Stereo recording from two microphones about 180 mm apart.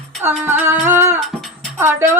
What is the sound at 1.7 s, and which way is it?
Speech, 15° right (ahead or behind).